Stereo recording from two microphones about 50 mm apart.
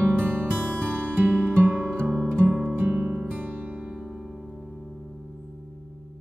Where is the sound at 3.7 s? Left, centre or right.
Centre.